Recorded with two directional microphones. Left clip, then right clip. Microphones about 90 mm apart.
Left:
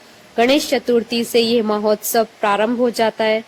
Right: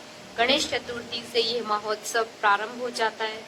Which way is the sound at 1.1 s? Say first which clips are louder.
Left 10 dB; 50° right (ahead or behind).